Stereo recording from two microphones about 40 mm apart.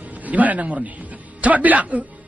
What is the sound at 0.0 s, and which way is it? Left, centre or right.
A man's voice, right.